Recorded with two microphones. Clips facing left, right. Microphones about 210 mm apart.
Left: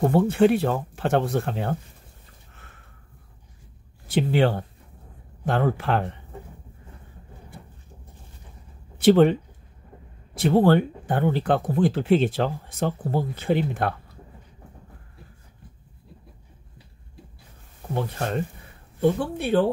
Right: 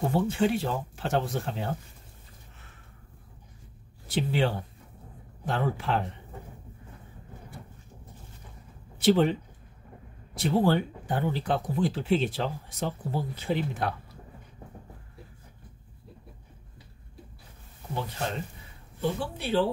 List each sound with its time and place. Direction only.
0.0 s speech: 60° left (ahead or behind)
4.1 s speech: 55° left (ahead or behind)
9.0 s speech: 60° left (ahead or behind)
10.4 s speech: 55° left (ahead or behind)
18.9 s speech: 55° left (ahead or behind)